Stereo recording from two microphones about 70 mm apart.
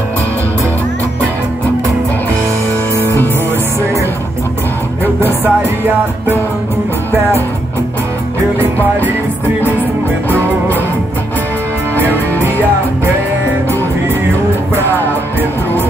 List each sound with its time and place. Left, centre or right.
3.0 s music: left
5.0 s music: right
8.5 s music: right